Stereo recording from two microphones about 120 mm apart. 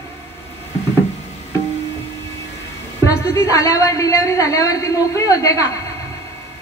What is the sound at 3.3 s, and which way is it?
A woman's voice, 25° left (ahead or behind).